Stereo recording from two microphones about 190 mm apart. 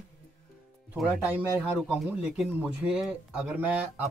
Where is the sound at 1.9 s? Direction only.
5° right (ahead or behind).